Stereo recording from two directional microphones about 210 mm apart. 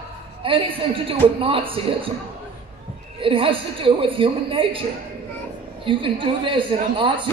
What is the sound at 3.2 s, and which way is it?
A man's voice, 25° right (ahead or behind).